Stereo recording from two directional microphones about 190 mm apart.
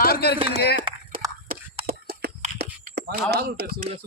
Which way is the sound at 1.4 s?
55° right (ahead or behind).